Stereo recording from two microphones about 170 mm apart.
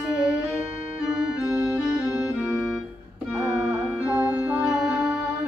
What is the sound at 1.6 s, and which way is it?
Music, 15° right (ahead or behind).